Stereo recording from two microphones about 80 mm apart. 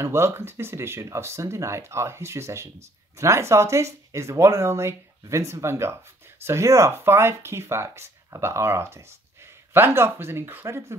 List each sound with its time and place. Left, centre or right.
0.0 s speech: right